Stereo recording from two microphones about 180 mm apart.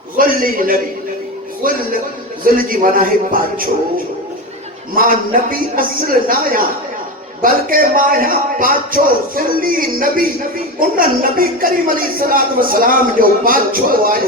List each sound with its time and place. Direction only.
0.2 s speech: 50° right (ahead or behind)
4.9 s speech: 50° right (ahead or behind)